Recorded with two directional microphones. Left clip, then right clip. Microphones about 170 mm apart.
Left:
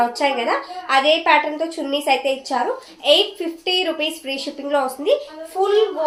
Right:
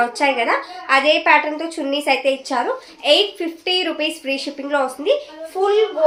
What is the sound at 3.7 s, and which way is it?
A woman's voice, 25° right (ahead or behind).